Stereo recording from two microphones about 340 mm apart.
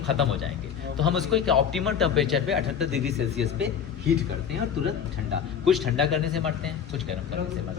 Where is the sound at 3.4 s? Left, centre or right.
Right.